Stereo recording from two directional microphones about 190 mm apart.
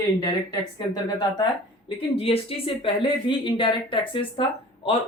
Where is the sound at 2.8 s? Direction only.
25° left (ahead or behind).